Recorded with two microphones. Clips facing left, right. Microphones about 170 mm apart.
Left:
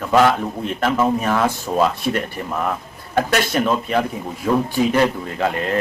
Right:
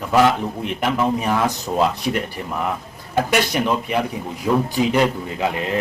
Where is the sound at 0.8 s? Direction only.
15° right (ahead or behind).